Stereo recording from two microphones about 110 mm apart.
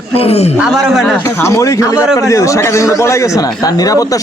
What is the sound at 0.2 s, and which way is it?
Speech, 70° left (ahead or behind).